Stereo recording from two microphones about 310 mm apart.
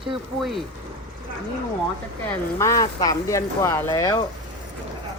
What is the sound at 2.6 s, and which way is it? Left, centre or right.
Speech, centre.